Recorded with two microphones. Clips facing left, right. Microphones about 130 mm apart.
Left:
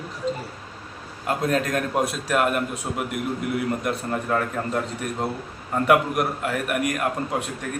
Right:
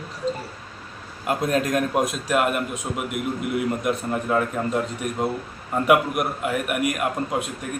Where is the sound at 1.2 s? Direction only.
20° right (ahead or behind).